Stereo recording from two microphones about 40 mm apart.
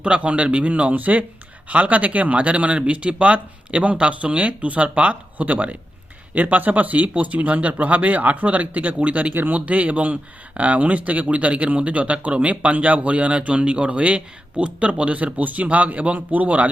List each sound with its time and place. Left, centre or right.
0.0 s speech: right